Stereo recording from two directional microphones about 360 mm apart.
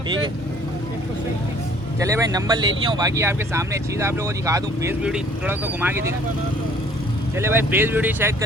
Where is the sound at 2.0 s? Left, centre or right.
Centre.